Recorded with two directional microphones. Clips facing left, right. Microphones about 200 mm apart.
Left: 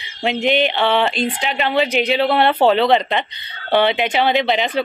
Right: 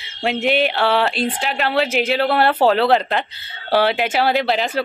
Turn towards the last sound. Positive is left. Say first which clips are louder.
# left 1 dB
turn(degrees=0)  # may be behind; listen again after turning